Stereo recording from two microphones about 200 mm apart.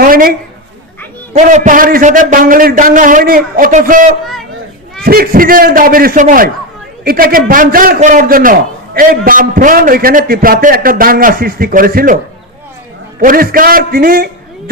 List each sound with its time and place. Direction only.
0.0 s a sound: 45° right (ahead or behind)
1.3 s a man's voice: 40° right (ahead or behind)
13.1 s a man's voice: 45° right (ahead or behind)